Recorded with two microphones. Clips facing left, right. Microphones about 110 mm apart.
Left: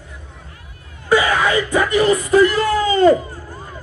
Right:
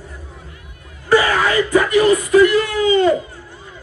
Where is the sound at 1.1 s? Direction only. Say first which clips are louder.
Right 1 dB; 20° left (ahead or behind); by 3.1 s 40° left (ahead or behind).